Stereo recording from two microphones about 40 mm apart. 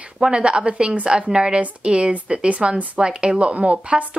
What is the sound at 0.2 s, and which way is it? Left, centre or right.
Speech, right.